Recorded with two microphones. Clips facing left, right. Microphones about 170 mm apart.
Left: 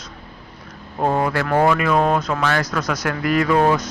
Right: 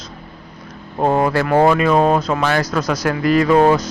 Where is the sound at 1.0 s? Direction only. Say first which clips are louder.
Right 4 dB; 30° right (ahead or behind).